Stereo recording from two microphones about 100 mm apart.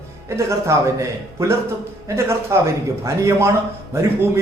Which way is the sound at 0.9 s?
30° right (ahead or behind).